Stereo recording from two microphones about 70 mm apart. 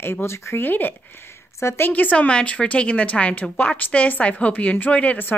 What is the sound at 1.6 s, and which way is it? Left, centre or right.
Speech, left.